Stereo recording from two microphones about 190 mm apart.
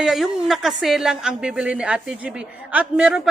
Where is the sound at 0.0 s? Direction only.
Centre (ahead or behind).